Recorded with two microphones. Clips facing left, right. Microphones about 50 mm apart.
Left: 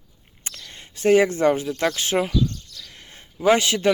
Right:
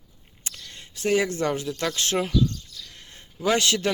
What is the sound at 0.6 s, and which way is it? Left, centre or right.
Speech, left.